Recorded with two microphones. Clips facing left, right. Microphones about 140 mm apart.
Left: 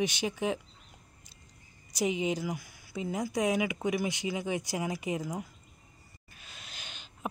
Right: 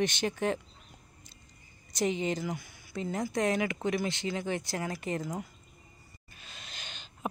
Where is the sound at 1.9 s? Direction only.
5° left (ahead or behind).